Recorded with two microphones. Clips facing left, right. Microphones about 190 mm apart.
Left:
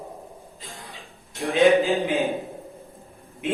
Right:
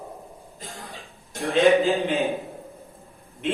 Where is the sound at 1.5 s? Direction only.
Centre (ahead or behind).